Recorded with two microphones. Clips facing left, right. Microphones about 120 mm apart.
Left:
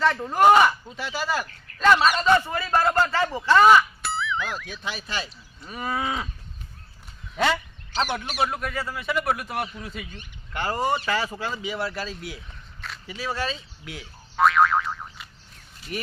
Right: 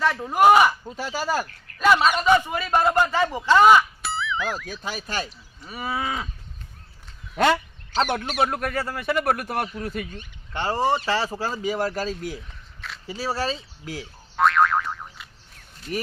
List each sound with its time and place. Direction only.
0.0 s a man's voice: 10° right (ahead or behind)
0.9 s speech: 40° right (ahead or behind)
1.8 s a man's voice: 10° right (ahead or behind)
4.0 s a sound: centre (ahead or behind)
4.6 s speech: 40° right (ahead or behind)
5.6 s cattle: 5° right (ahead or behind)
7.4 s speech: 55° right (ahead or behind)
10.5 s speech: 25° right (ahead or behind)
14.3 s boing: centre (ahead or behind)